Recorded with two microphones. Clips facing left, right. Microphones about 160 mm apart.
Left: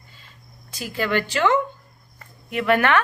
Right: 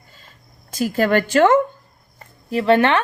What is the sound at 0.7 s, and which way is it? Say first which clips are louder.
Speech: right 7 dB; 45° right (ahead or behind).